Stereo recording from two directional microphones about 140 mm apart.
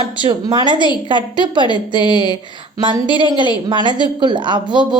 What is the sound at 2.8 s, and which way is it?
A woman's voice, 35° right (ahead or behind).